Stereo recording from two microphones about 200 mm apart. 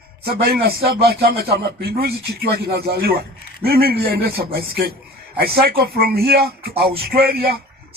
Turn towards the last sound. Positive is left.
turn(degrees=-50)  # may be behind; listen again after turning